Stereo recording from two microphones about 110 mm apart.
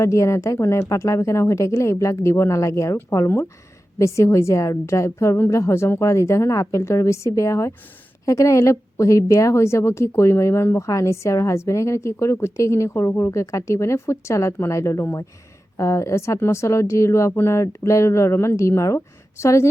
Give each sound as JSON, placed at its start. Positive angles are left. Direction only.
{"t": 0.0, "sound": "a woman's voice", "side_deg": 25}